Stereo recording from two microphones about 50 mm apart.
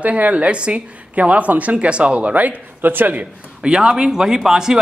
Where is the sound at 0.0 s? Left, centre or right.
Right.